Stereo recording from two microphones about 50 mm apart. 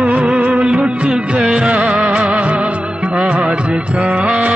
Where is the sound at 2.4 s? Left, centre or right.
Centre.